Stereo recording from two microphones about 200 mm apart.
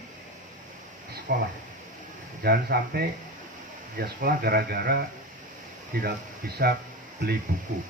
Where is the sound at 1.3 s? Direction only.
45° right (ahead or behind).